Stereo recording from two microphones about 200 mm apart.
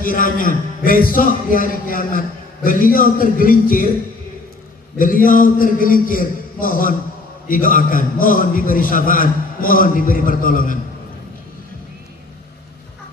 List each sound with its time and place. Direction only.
0.0 s a man's voice: 45° left (ahead or behind)
4.9 s a man's voice: 45° left (ahead or behind)